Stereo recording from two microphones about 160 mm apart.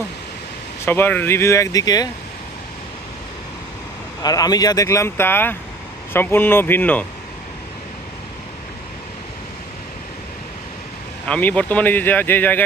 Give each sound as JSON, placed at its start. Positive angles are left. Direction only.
{"t": 0.9, "sound": "speech", "side_deg": 15}
{"t": 4.2, "sound": "speech", "side_deg": 25}
{"t": 11.3, "sound": "speech", "side_deg": 10}